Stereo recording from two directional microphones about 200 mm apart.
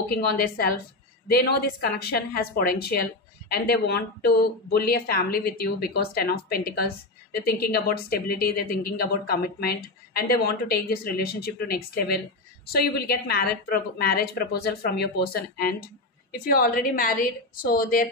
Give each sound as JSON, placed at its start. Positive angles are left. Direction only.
{"t": 0.1, "sound": "speech", "side_deg": 50}